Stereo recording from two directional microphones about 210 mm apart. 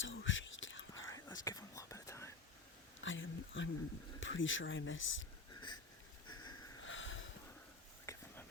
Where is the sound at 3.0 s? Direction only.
65° left (ahead or behind).